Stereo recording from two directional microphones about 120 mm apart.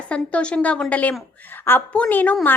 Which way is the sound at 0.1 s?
10° left (ahead or behind).